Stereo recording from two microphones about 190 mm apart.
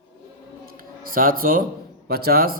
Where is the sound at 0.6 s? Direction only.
50° right (ahead or behind).